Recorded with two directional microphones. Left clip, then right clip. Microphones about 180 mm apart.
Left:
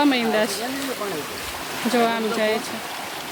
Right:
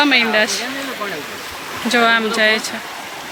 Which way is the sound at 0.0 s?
20° left (ahead or behind).